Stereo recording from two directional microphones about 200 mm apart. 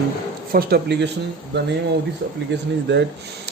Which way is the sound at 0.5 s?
55° right (ahead or behind).